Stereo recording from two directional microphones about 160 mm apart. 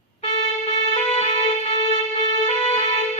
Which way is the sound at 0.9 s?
40° left (ahead or behind).